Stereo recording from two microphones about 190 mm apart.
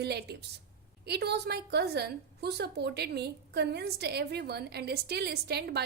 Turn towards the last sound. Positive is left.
turn(degrees=-60)  # may be behind; listen again after turning